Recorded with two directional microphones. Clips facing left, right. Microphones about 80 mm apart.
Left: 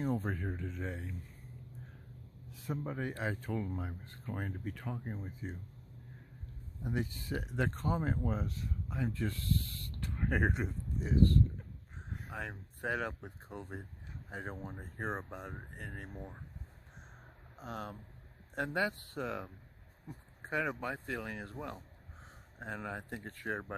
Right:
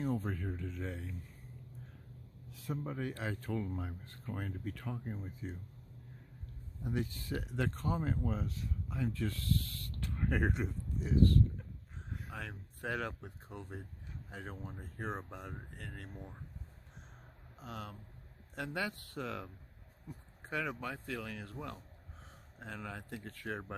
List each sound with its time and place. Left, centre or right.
0.0 s speech: left
2.6 s speech: left
4.0 s speech: left
6.8 s speech: left
10.1 s speech: centre
12.3 s speech: centre
17.6 s speech: left
20.1 s a sound: left
20.8 s speech: left